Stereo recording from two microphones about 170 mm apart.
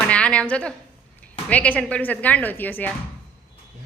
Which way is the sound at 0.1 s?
5° left (ahead or behind).